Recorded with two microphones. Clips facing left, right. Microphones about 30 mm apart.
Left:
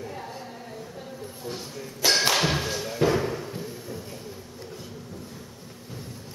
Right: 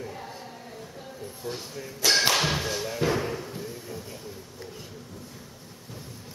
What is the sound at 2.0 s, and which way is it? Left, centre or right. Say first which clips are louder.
Thump: left 1 dB; centre.